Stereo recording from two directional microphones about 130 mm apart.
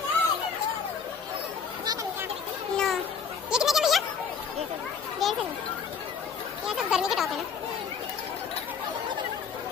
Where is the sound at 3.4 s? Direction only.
5° right (ahead or behind).